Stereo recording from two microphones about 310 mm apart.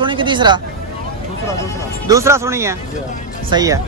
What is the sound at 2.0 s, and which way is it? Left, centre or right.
Speech, centre.